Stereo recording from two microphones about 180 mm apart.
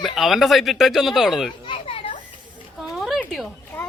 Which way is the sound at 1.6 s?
30° left (ahead or behind).